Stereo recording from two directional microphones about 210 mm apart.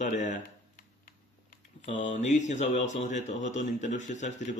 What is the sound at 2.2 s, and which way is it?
Speech, 35° left (ahead or behind).